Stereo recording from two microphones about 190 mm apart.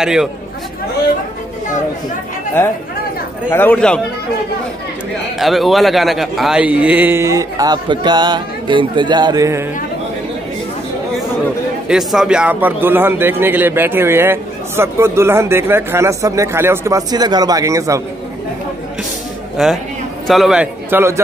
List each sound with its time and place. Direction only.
0.0 s a man's voice: 5° right (ahead or behind)
3.4 s speech: 10° left (ahead or behind)
5.4 s a man's voice: centre (ahead or behind); by 9.7 s 15° right (ahead or behind)
11.9 s a man's voice: centre (ahead or behind)
19.5 s a man's voice: centre (ahead or behind)